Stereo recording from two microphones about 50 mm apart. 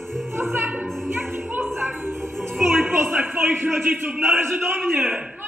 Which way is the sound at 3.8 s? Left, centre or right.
Right.